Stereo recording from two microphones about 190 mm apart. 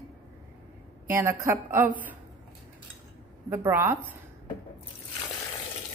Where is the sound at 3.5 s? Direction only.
10° right (ahead or behind).